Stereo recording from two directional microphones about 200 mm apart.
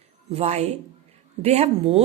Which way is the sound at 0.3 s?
30° right (ahead or behind).